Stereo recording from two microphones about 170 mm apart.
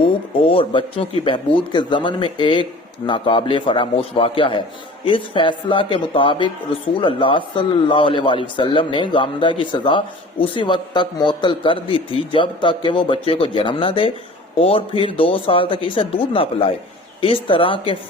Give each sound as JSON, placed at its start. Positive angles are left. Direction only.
{"t": 0.4, "sound": "a man's voice", "side_deg": 30}